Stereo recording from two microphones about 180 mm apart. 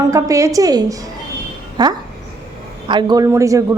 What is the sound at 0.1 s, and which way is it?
A woman's voice, 15° right (ahead or behind).